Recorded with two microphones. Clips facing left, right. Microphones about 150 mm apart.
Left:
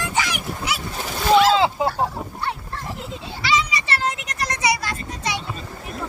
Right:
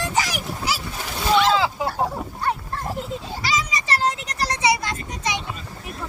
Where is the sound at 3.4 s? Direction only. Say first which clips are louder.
Left 5 dB; 40° right (ahead or behind); by 5.4 s 25° right (ahead or behind).